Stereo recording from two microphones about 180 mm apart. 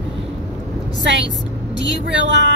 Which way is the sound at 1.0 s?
80° right.